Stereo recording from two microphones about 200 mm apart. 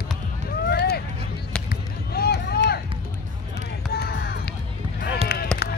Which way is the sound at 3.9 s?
50° left (ahead or behind).